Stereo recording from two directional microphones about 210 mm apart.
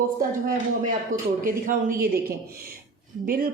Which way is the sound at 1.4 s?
40° right (ahead or behind).